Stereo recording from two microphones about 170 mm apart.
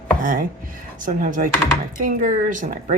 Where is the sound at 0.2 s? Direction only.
55° right (ahead or behind).